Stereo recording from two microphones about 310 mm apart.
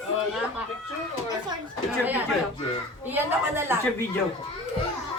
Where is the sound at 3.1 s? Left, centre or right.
Centre.